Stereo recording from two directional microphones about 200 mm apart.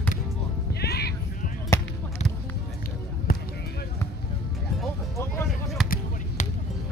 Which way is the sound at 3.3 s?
45° left (ahead or behind).